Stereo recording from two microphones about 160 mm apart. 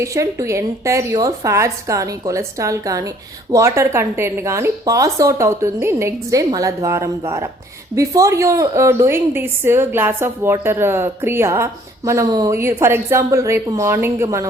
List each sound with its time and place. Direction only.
0.0 s a woman's voice: 20° right (ahead or behind)